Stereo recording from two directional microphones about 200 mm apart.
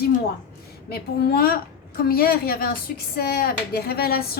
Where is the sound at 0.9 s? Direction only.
50° left (ahead or behind).